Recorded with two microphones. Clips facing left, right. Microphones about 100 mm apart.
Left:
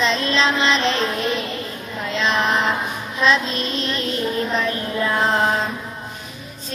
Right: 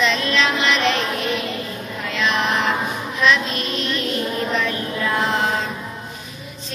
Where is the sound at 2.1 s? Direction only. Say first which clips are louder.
Left 1 dB; 30° left (ahead or behind).